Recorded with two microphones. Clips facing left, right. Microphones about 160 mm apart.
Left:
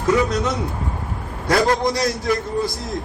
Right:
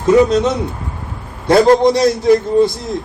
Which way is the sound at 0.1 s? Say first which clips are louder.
Right 8 dB; 25° right (ahead or behind).